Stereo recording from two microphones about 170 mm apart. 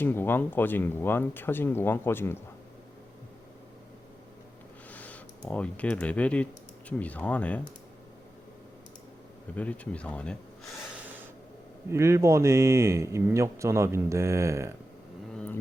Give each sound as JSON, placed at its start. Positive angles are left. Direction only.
{"t": 0.0, "sound": "speech", "side_deg": 10}
{"t": 4.9, "sound": "a sound", "side_deg": 10}
{"t": 5.5, "sound": "speech", "side_deg": 10}
{"t": 9.6, "sound": "speech", "side_deg": 10}
{"t": 11.9, "sound": "a man's voice", "side_deg": -15}
{"t": 15.3, "sound": "vehicle", "side_deg": 5}